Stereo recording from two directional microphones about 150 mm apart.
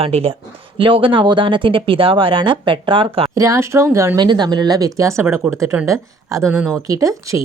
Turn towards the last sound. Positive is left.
turn(degrees=-20)  # may be behind; listen again after turning